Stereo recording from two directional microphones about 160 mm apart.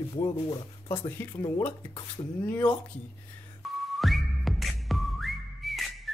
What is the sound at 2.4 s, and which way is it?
Speech, 10° left (ahead or behind).